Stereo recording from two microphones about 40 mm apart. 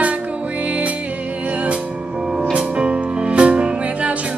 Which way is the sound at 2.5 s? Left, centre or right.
Right.